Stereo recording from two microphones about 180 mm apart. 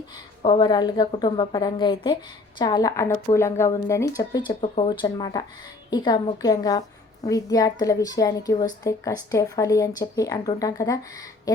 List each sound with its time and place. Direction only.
0.4 s a woman's voice: 25° left (ahead or behind)